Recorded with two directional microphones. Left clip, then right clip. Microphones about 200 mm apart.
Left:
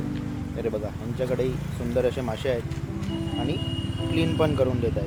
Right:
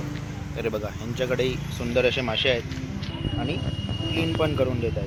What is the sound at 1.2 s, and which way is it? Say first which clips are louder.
Speech: right 2 dB; 5° left (ahead or behind).